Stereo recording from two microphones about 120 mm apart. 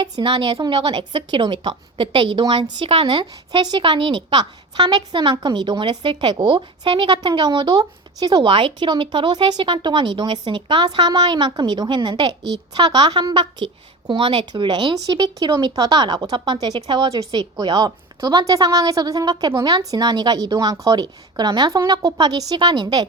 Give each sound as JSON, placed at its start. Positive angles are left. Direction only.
{"t": 0.0, "sound": "speech", "side_deg": -40}